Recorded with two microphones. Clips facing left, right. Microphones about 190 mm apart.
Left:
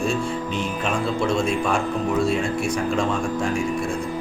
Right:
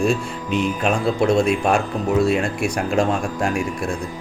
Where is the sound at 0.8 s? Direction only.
65° right (ahead or behind).